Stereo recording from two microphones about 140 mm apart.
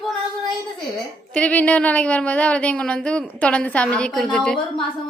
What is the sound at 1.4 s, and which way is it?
Speech, 10° left (ahead or behind).